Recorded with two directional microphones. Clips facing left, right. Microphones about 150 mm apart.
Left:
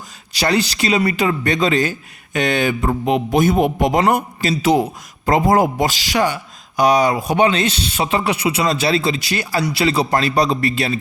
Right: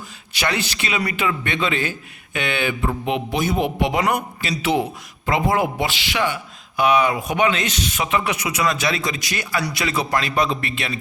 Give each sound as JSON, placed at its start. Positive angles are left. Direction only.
{"t": 0.3, "sound": "a man's voice", "side_deg": 35}